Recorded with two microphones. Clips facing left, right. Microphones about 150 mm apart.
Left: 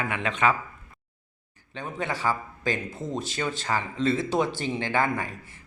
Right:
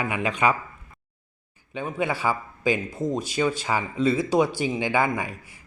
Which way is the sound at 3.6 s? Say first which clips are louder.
Right 3 dB; 10° right (ahead or behind).